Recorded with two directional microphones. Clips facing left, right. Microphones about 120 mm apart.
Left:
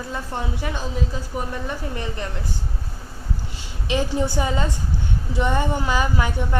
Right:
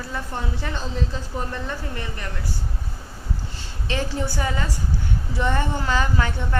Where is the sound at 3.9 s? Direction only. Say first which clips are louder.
Left 4 dB; 15° left (ahead or behind).